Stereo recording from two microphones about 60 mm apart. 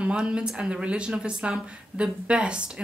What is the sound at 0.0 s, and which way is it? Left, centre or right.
Speech, centre.